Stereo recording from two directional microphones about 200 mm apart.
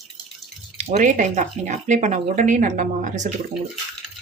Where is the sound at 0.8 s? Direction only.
35° right (ahead or behind).